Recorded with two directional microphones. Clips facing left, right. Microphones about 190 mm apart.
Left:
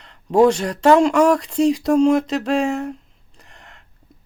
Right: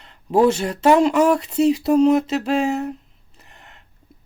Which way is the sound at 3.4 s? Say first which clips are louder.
Left 1 dB; 5° right (ahead or behind).